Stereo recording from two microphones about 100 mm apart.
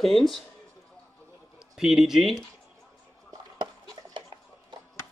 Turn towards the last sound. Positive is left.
turn(degrees=-50)  # may be behind; listen again after turning